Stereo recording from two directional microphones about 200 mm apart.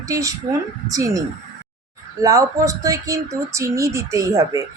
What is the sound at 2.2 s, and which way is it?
A woman's voice, 15° right (ahead or behind).